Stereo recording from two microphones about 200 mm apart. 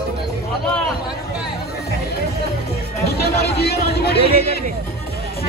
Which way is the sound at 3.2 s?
50° left (ahead or behind).